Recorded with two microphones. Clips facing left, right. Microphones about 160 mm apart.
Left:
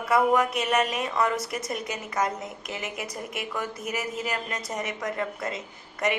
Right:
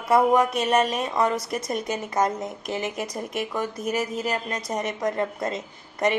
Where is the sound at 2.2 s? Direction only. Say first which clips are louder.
Right 4 dB; 35° right (ahead or behind).